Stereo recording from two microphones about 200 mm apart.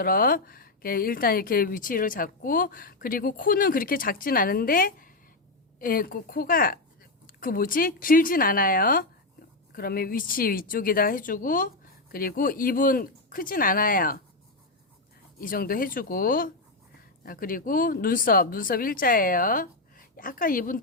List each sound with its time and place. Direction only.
0.0 s speech: 45° left (ahead or behind)
15.4 s speech: 45° left (ahead or behind)